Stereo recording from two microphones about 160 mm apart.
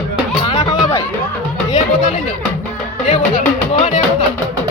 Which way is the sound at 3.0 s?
50° left (ahead or behind).